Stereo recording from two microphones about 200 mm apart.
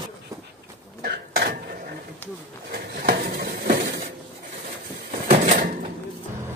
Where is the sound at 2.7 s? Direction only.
50° right (ahead or behind).